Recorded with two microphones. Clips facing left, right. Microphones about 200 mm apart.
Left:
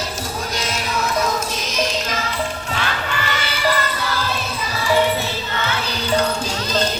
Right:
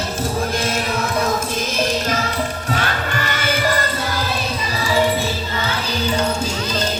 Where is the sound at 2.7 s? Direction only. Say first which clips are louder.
Right 3 dB; 50° right (ahead or behind).